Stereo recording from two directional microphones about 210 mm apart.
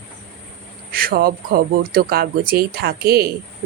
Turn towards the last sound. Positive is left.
turn(degrees=-45)  # may be behind; listen again after turning